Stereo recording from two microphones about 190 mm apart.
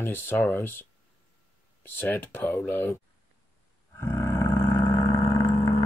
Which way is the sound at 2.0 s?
10° left (ahead or behind).